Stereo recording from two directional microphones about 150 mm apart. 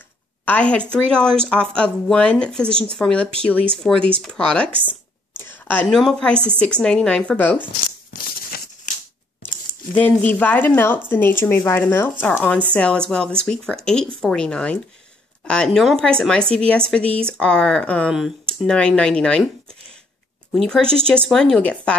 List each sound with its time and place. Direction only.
0.5 s speech: 10° left (ahead or behind)
4.7 s a sound: 10° right (ahead or behind)
5.4 s a woman's voice: 10° left (ahead or behind)
8.5 s maraca: 75° left (ahead or behind)
9.9 s speech: 10° left (ahead or behind)
20.5 s speech: 5° left (ahead or behind)